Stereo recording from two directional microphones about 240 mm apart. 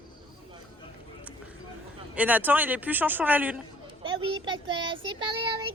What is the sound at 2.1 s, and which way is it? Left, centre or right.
Speech, centre.